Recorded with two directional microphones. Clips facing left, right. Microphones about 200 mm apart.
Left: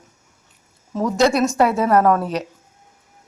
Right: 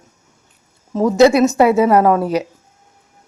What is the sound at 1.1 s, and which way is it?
A man's voice, 5° right (ahead or behind).